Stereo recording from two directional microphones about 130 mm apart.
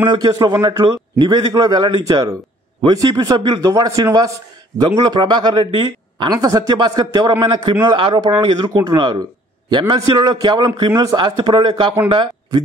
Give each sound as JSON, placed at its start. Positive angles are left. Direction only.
{"t": 0.0, "sound": "a man's voice", "side_deg": -35}